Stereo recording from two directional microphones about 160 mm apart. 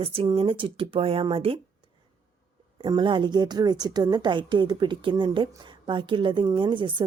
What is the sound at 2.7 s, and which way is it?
A woman's voice, 30° right (ahead or behind).